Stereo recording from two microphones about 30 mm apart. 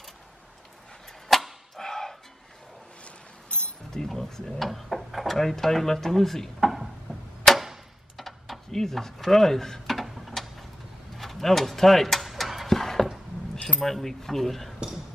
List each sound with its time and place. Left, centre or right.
1.3 s arrow: centre
1.8 s music: centre
3.4 s a sound: left
3.9 s speech: left
4.3 s speech: centre
6.6 s a sound: centre
7.5 s arrow: centre
8.2 s speech: centre
9.9 s a sound: centre
13.7 s speech: centre